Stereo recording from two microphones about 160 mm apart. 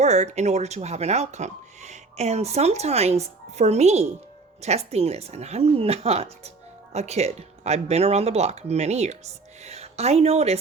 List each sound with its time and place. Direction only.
0.0 s speech: 45° right (ahead or behind)